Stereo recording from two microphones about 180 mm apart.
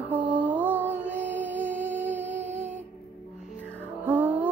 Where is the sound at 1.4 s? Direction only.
10° right (ahead or behind).